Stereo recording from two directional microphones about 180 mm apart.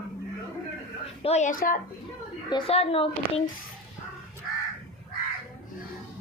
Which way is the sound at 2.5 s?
35° left (ahead or behind).